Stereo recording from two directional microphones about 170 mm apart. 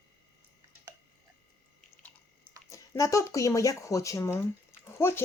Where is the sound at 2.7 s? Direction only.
20° left (ahead or behind).